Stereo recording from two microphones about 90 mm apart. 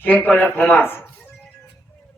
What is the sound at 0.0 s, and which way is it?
Speech, 20° left (ahead or behind).